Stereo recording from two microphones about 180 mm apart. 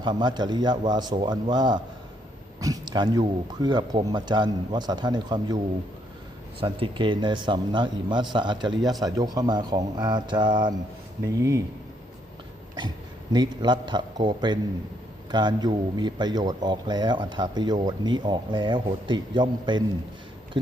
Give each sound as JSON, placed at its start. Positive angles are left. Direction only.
{"t": 0.0, "sound": "speech", "side_deg": -25}
{"t": 6.6, "sound": "speech", "side_deg": -30}
{"t": 13.3, "sound": "speech", "side_deg": -25}